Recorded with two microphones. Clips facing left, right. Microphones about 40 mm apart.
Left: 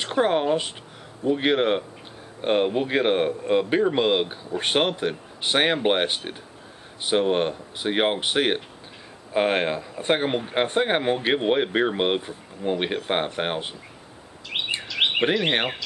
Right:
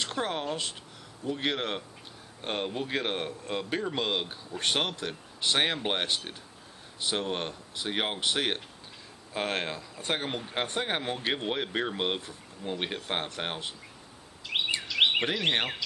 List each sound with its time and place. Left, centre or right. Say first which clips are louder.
0.0 s speech: left 10 dB; left
14.5 s chirp: left 1 dB; centre
14.9 s a sound: left 2 dB; centre
15.2 s speech: left 6 dB; left